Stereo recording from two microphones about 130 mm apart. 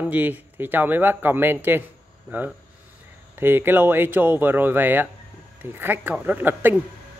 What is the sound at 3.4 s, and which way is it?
Speech, 15° right (ahead or behind).